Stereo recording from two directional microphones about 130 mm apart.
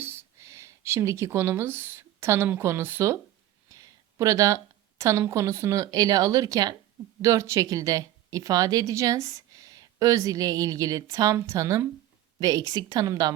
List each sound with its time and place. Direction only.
0.0 s a woman's voice: 20° right (ahead or behind)